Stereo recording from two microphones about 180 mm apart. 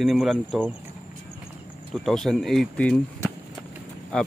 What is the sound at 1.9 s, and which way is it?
Speech, centre (ahead or behind).